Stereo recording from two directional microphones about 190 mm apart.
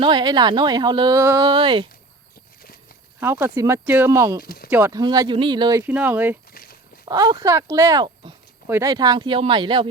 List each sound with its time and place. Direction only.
0.0 s speech: 25° right (ahead or behind)
3.2 s speech: 10° right (ahead or behind)
4.4 s speech: 55° left (ahead or behind)
4.7 s speech: 15° right (ahead or behind)
5.8 s speech: 10° right (ahead or behind)
6.5 s walk: 50° left (ahead or behind)
7.0 s speech: 20° right (ahead or behind)